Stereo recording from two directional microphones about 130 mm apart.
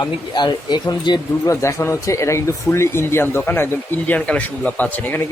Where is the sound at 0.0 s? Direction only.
35° left (ahead or behind); by 5.2 s 15° left (ahead or behind).